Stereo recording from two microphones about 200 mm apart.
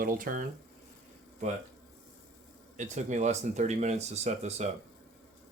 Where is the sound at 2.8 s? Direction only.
35° right (ahead or behind).